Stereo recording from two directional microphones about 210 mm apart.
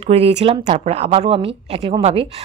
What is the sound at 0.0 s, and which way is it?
A woman's voice, 30° right (ahead or behind).